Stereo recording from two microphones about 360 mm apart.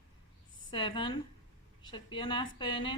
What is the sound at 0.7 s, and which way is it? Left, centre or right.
A woman's voice, centre.